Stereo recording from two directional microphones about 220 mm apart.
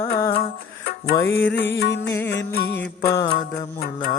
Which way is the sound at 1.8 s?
50° left (ahead or behind).